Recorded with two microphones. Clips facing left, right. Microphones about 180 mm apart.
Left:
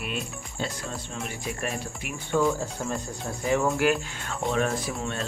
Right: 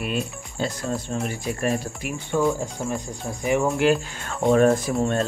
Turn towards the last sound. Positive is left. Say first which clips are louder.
# right 8 dB
turn(degrees=-45)  # may be behind; listen again after turning